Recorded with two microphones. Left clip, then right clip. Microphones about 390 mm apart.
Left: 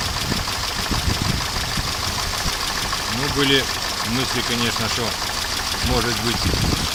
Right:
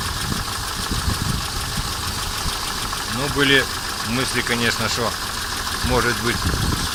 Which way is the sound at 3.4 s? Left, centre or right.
Centre.